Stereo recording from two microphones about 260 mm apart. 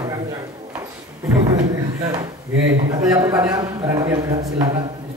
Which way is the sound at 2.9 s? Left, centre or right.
Centre.